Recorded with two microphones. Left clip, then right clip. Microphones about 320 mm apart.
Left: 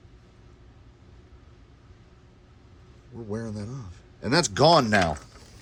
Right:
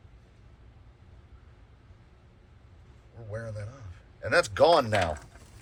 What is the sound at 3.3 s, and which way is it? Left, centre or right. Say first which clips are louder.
Speech: left 4 dB; centre.